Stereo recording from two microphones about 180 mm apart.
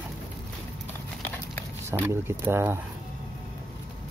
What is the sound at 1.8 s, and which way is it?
Speech, 10° right (ahead or behind).